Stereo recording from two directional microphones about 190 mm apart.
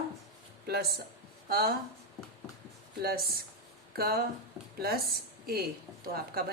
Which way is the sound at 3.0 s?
55° right (ahead or behind).